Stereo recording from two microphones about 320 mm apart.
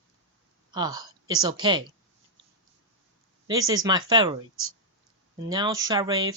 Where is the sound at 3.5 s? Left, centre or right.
Centre.